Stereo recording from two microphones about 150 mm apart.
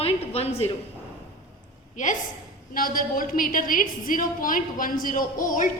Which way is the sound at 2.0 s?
55° left (ahead or behind).